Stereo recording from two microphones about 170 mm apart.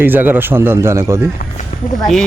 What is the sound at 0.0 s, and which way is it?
Speech, 10° right (ahead or behind).